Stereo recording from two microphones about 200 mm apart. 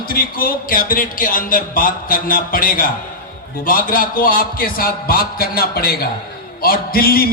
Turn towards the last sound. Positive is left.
turn(degrees=50)  # may be behind; listen again after turning